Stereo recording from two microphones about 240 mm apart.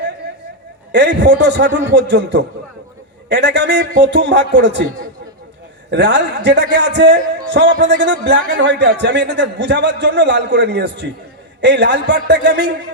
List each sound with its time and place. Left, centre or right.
0.9 s a man's voice: right
5.9 s a man's voice: right